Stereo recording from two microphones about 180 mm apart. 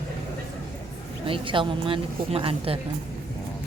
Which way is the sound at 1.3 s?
30° right (ahead or behind).